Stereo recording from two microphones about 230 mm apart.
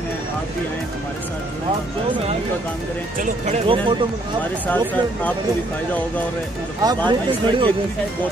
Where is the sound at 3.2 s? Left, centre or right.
Right.